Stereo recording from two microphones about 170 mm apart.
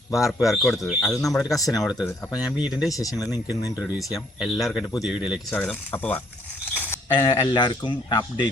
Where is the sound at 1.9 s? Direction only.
20° left (ahead or behind).